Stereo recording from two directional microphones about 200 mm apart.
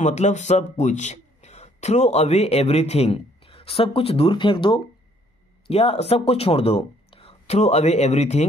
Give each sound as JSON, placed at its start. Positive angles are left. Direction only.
{"t": 0.0, "sound": "a man's voice", "side_deg": 35}